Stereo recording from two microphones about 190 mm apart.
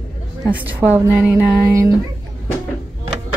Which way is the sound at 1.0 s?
10° right (ahead or behind).